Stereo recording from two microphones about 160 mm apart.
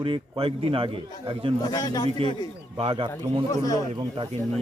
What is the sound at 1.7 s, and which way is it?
Speech, 25° left (ahead or behind).